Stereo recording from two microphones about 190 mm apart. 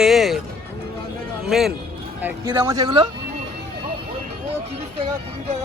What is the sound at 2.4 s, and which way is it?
Speech, 20° right (ahead or behind).